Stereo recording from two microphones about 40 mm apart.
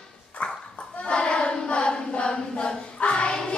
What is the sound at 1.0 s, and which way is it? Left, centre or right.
Choir, left.